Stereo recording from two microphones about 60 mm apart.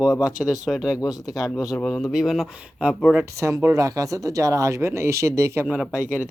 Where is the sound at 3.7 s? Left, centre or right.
Right.